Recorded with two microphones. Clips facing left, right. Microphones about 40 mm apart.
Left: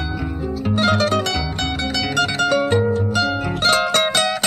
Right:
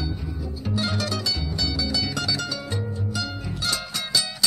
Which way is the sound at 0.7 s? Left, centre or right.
Left.